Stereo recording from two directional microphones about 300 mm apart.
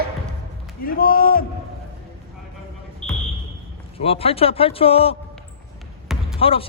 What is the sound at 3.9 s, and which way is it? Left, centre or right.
Speech, centre.